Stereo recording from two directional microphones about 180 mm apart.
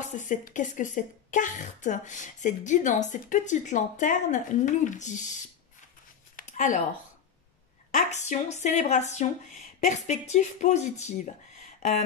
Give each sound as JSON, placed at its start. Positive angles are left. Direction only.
{"t": 0.3, "sound": "a woman's voice", "side_deg": 45}
{"t": 6.3, "sound": "a sound", "side_deg": 45}
{"t": 7.9, "sound": "speech", "side_deg": 40}